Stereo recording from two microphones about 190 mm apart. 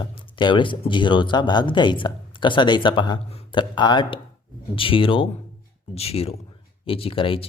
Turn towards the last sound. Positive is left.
turn(degrees=30)  # may be behind; listen again after turning